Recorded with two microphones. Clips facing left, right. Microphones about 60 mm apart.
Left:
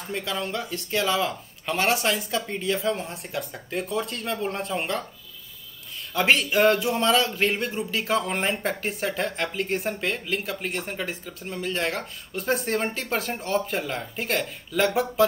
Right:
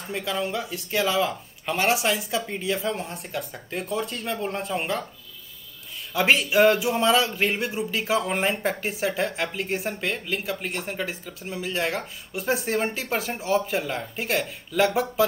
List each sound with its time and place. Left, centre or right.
0.0 s speech: centre
6.1 s speech: centre